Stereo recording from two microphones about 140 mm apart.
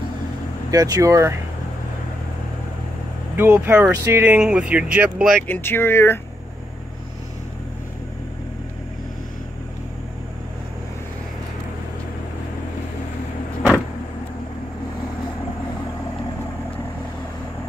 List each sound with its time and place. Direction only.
0.7 s speech: 25° right (ahead or behind)
3.3 s speech: 15° right (ahead or behind)
5.5 s speech: 15° left (ahead or behind)